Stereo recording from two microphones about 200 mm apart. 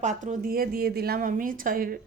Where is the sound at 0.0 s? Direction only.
35° right (ahead or behind).